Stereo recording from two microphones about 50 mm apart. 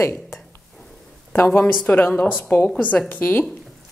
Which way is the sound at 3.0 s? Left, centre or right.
Left.